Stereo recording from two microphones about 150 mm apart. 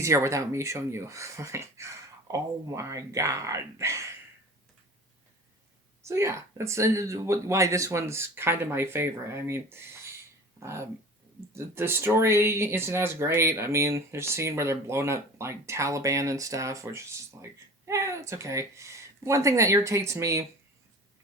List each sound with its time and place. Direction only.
0.0 s speech: 20° right (ahead or behind)
6.0 s speech: 20° right (ahead or behind)